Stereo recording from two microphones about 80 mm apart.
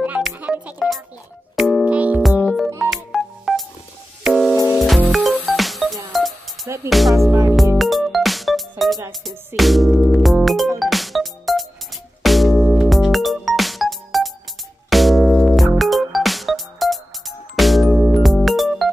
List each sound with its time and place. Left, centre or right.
0.0 s music: right
0.7 s music: centre
1.9 s music: centre
2.9 s music: centre